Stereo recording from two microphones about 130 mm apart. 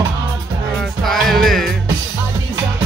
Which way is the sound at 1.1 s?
Centre (ahead or behind).